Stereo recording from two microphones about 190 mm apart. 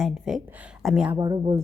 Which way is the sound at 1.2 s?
20° right (ahead or behind).